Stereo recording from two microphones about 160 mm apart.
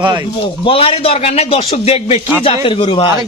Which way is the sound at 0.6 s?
35° left (ahead or behind).